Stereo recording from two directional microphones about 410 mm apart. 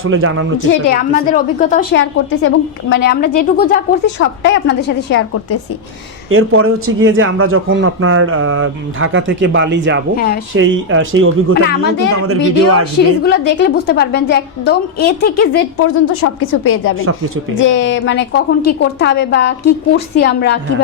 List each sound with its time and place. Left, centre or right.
0.0 s speech: right
0.7 s a woman's voice: left
6.3 s speech: right
10.2 s a woman's voice: left
10.5 s a woman's voice: right
13.2 s a woman's voice: left